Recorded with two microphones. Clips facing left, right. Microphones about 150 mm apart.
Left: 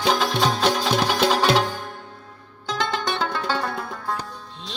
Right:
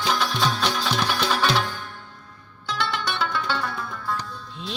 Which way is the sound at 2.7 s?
45° left (ahead or behind).